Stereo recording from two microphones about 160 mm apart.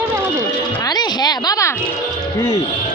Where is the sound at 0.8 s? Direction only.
25° left (ahead or behind).